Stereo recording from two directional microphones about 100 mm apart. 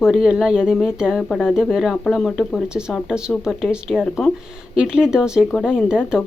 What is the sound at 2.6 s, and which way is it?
Speech, 10° right (ahead or behind).